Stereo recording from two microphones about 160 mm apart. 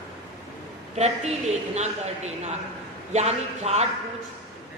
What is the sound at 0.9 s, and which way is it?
A woman's voice, 45° right (ahead or behind).